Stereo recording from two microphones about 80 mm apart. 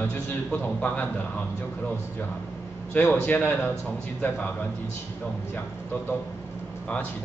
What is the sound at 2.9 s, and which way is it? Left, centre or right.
Speech, left.